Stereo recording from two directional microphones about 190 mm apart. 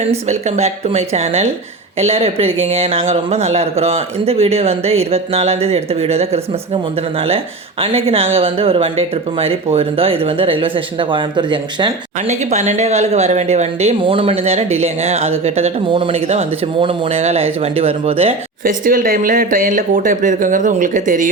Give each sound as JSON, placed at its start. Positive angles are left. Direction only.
{"t": 0.3, "sound": "a man's voice", "side_deg": -35}
{"t": 12.3, "sound": "a man's voice", "side_deg": -35}
{"t": 18.6, "sound": "speech", "side_deg": -45}